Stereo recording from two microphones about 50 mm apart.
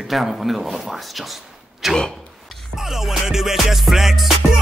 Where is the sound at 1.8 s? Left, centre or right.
Centre.